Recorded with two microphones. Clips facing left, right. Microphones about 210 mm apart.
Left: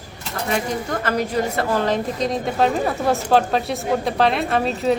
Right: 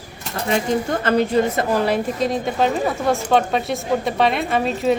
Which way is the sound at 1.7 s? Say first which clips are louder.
Even; 10° right (ahead or behind).